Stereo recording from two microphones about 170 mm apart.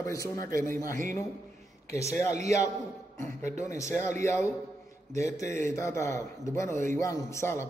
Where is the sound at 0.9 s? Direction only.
50° right (ahead or behind).